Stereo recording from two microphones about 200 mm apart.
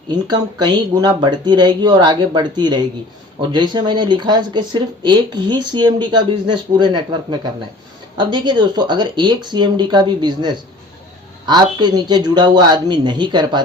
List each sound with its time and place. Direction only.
0.3 s speech: 20° right (ahead or behind)